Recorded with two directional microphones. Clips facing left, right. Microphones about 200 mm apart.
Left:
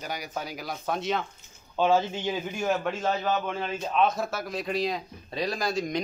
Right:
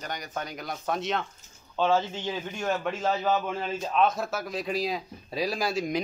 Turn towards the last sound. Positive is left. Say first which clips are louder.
# even
turn(degrees=-5)  # may be behind; listen again after turning